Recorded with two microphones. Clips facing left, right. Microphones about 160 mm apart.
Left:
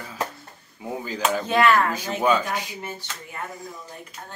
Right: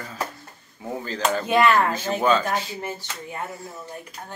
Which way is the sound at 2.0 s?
10° left (ahead or behind).